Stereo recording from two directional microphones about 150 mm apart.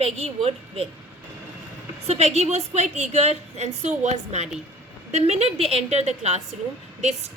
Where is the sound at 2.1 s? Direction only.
45° right (ahead or behind).